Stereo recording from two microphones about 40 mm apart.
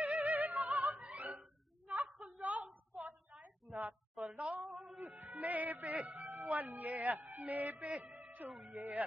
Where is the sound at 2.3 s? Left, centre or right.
Right.